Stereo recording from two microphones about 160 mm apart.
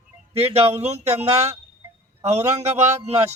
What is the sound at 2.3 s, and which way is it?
Speech, 45° right (ahead or behind).